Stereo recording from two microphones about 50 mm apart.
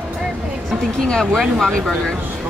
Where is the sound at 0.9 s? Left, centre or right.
Centre.